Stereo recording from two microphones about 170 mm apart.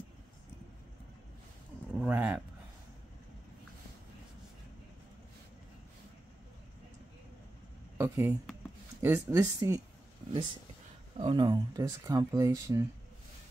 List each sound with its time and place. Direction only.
2.0 s speech: 10° right (ahead or behind)
8.0 s speech: 15° right (ahead or behind)
11.1 s speech: 30° right (ahead or behind)